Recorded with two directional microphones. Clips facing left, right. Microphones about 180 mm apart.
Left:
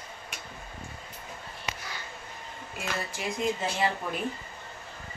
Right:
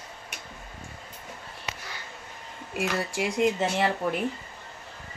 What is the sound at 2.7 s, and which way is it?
A woman's voice, 80° right.